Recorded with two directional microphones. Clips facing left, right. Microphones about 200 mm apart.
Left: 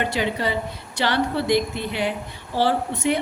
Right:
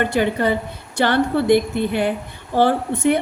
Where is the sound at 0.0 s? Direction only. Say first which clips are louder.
Right 5 dB; 50° right (ahead or behind).